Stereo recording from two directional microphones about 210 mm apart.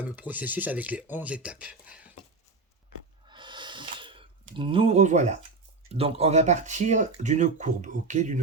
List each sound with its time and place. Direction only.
0.0 s speech: 10° right (ahead or behind)
3.2 s a sound: 20° right (ahead or behind)
5.9 s speech: 30° right (ahead or behind)